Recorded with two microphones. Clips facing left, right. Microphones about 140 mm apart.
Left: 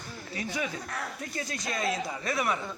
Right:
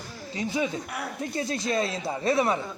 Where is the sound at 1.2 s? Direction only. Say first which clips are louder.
Right 7 dB; 25° right (ahead or behind).